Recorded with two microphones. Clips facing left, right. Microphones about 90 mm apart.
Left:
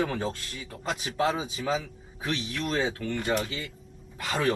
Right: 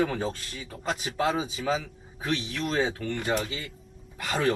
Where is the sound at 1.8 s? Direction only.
25° right (ahead or behind).